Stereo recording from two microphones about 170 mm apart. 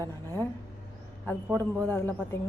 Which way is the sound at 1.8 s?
10° left (ahead or behind).